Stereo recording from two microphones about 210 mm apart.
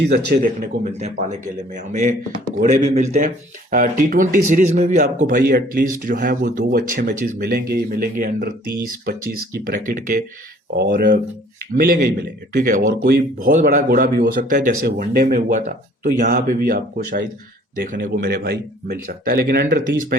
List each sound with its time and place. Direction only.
0.4 s speech: 35° right (ahead or behind)